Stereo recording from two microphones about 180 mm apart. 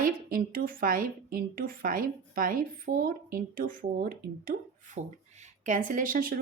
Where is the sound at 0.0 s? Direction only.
50° right (ahead or behind).